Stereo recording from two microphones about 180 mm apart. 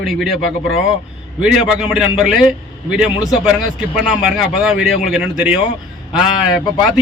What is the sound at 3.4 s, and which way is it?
A man's voice, 5° right (ahead or behind).